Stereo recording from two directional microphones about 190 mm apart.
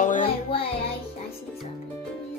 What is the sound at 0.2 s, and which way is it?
Music, 30° left (ahead or behind).